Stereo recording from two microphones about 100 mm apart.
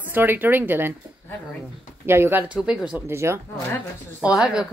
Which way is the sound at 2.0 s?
25° right (ahead or behind).